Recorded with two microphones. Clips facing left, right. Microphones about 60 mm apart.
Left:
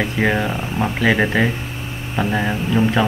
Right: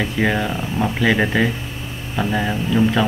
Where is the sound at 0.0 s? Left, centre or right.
Centre.